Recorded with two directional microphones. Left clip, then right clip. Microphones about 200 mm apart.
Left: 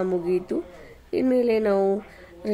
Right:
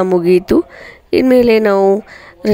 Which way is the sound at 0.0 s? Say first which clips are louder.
Right 13 dB; 45° right (ahead or behind).